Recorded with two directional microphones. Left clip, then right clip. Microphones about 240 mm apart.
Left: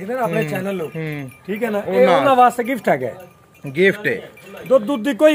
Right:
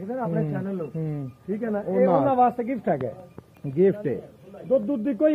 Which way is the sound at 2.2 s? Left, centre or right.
Left.